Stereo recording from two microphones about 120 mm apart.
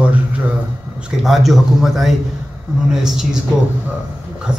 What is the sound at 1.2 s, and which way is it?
A man's voice, centre (ahead or behind).